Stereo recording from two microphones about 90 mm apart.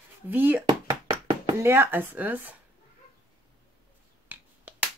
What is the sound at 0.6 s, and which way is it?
Knock, 65° right (ahead or behind).